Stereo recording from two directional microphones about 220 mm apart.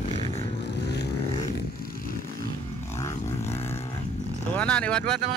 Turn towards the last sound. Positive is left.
turn(degrees=5)  # may be behind; listen again after turning